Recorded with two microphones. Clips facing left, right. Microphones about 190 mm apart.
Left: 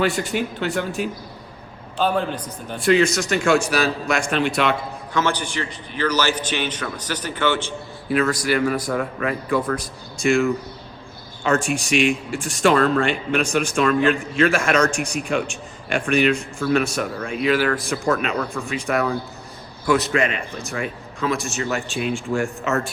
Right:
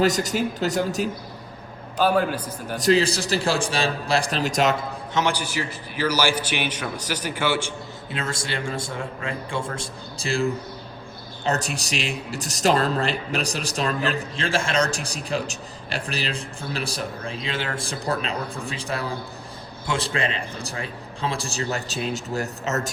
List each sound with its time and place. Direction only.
0.0 s a man's voice: 40° right (ahead or behind)
2.0 s a man's voice: 5° right (ahead or behind)
2.7 s a man's voice: 35° right (ahead or behind)
5.1 s a man's voice: 15° right (ahead or behind)
8.1 s a man's voice: 25° right (ahead or behind)
11.6 s a man's voice: 35° right (ahead or behind)